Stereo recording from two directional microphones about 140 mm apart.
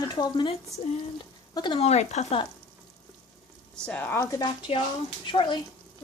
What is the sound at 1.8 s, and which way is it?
Speech, 50° left (ahead or behind).